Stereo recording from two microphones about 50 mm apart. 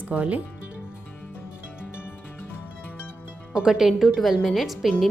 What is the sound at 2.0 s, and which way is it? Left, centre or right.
Music, left.